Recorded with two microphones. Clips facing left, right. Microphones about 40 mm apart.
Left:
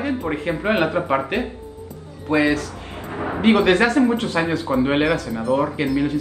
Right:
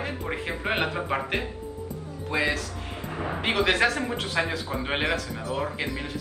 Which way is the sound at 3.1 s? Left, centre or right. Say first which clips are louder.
Left 6 dB; left.